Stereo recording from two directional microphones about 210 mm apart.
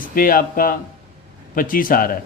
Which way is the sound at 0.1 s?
40° left (ahead or behind).